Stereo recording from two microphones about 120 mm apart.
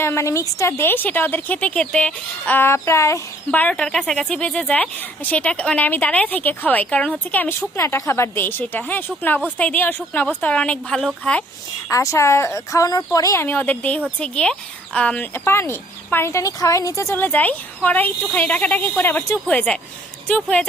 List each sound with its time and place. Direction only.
0.0 s speech: 20° left (ahead or behind)
3.5 s speech: 10° left (ahead or behind)
7.8 s speech: 25° left (ahead or behind); by 11.4 s 5° left (ahead or behind)
11.9 s speech: 25° left (ahead or behind)